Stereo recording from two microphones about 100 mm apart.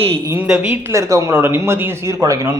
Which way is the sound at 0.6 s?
30° right (ahead or behind).